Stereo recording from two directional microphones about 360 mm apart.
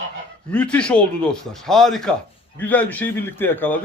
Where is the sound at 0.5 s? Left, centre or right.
Centre.